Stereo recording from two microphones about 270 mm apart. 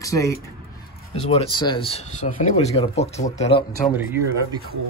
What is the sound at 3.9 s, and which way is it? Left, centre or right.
Speech, centre.